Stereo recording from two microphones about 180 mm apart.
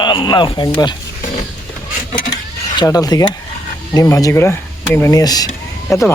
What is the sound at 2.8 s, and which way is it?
Speech, 20° left (ahead or behind).